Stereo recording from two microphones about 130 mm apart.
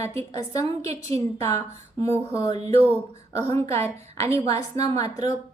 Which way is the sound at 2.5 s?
55° right (ahead or behind).